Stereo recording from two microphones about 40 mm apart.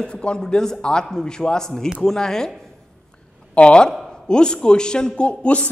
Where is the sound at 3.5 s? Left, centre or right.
Left.